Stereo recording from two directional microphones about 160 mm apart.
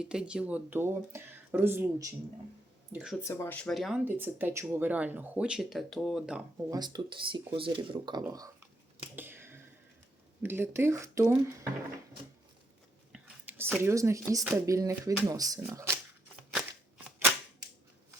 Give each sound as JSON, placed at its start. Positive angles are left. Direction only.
{"t": 0.0, "sound": "speech", "side_deg": -5}
{"t": 2.9, "sound": "speech", "side_deg": -5}
{"t": 3.2, "sound": "speech", "side_deg": 15}
{"t": 4.0, "sound": "speech", "side_deg": -10}
{"t": 6.7, "sound": "speech", "side_deg": -25}
{"t": 9.1, "sound": "finger snapping", "side_deg": -15}
{"t": 10.4, "sound": "speech", "side_deg": -15}
{"t": 13.1, "sound": "speech", "side_deg": -10}